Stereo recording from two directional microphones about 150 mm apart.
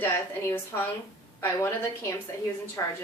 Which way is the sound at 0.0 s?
15° left (ahead or behind).